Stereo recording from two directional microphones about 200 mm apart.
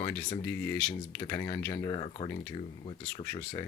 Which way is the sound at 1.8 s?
25° left (ahead or behind).